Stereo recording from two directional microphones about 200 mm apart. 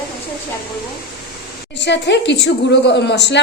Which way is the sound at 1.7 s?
60° left (ahead or behind).